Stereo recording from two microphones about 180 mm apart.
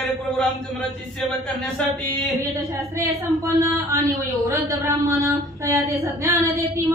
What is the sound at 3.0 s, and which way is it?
Female singing, 15° right (ahead or behind).